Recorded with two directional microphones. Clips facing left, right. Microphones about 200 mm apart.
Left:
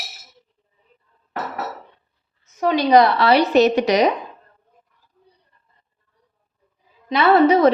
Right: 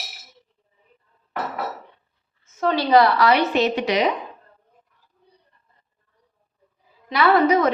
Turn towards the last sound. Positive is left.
turn(degrees=30)  # may be behind; listen again after turning